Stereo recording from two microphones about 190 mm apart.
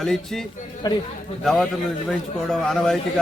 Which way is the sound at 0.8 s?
20° left (ahead or behind).